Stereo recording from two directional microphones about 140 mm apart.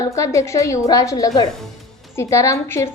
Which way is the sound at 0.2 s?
20° left (ahead or behind).